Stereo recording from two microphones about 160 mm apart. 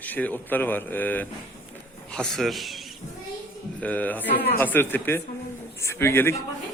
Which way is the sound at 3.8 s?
10° left (ahead or behind).